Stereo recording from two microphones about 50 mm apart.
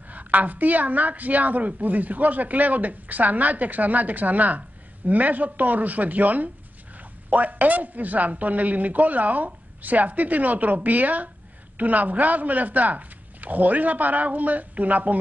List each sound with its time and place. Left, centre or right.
0.1 s a woman's voice: right